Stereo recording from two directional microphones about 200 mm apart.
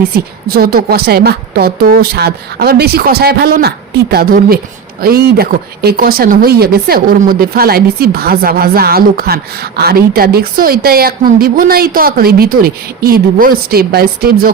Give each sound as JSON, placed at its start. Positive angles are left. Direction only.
{"t": 0.1, "sound": "a woman's voice", "side_deg": -50}